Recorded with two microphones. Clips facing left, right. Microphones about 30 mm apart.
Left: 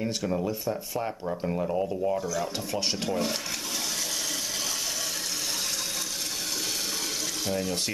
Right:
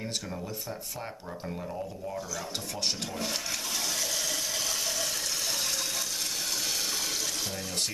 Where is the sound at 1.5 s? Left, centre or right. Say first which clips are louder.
Left 9 dB; left.